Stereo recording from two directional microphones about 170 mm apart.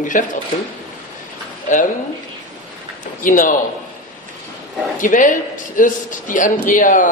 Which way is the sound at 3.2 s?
50° left (ahead or behind).